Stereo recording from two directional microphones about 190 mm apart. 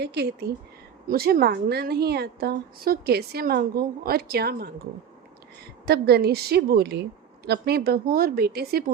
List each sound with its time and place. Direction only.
0.0 s a woman's voice: 60° right (ahead or behind)
5.8 s a woman's voice: 55° right (ahead or behind)